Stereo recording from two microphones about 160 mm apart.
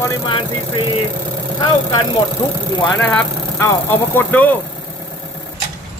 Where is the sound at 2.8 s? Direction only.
10° left (ahead or behind).